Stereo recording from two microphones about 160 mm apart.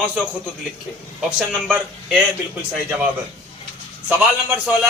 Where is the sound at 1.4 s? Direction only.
5° right (ahead or behind).